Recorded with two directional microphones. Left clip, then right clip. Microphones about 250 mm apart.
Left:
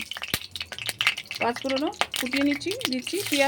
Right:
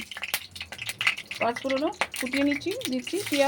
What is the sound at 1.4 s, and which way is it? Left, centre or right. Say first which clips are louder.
Speech: even; centre.